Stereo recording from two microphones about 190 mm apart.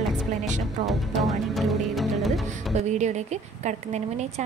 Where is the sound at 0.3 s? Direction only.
40° right (ahead or behind).